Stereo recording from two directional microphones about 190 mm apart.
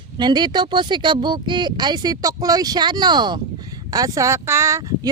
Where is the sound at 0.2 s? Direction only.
20° right (ahead or behind).